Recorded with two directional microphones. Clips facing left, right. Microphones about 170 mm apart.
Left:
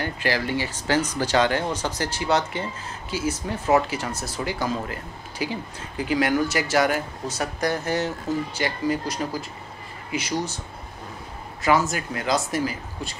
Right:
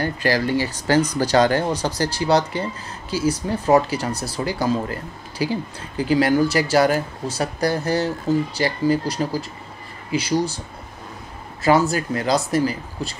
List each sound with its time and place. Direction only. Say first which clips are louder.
0.0 s speech: right 5 dB; 40° right (ahead or behind)
11.6 s speech: right 4 dB; 35° right (ahead or behind)